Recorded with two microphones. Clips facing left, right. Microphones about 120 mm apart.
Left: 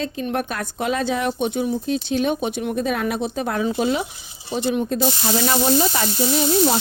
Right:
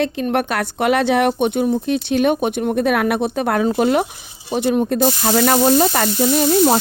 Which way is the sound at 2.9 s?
65° right (ahead or behind).